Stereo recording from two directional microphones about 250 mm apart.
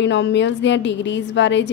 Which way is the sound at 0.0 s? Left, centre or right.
Left.